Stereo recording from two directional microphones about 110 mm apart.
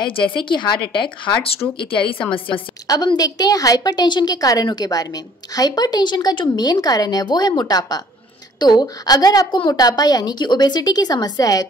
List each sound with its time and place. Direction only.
0.5 s speech: 45° left (ahead or behind)
2.9 s a woman's voice: 35° left (ahead or behind)